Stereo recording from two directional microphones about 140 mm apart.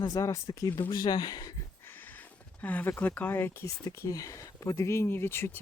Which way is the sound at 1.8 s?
15° left (ahead or behind).